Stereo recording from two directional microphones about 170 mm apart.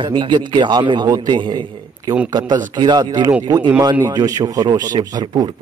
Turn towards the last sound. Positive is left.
turn(degrees=-30)  # may be behind; listen again after turning